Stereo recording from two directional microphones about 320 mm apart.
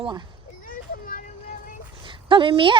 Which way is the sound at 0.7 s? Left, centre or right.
Left.